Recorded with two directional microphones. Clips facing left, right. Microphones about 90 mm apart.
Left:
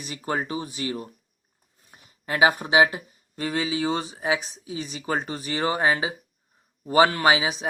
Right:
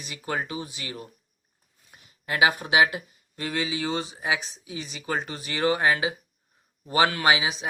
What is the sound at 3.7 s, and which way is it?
Speech, 45° left (ahead or behind).